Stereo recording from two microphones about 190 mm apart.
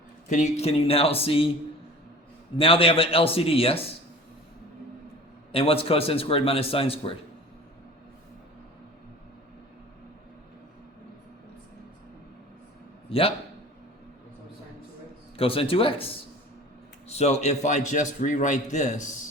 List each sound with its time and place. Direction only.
0.3 s a man's voice: 40° left (ahead or behind)
2.6 s a man's voice: 30° left (ahead or behind)
5.5 s a man's voice: 30° left (ahead or behind)
13.1 s a man's voice: 30° left (ahead or behind)
15.4 s a man's voice: 30° left (ahead or behind)